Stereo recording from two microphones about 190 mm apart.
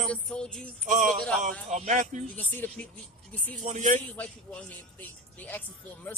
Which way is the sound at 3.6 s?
40° right (ahead or behind).